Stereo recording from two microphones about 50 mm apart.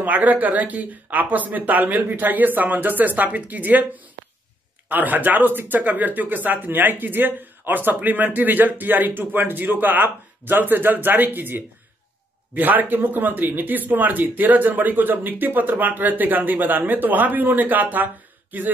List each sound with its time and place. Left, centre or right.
0.0 s speech: right